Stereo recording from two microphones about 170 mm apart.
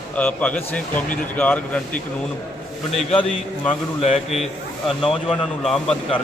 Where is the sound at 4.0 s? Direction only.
40° left (ahead or behind).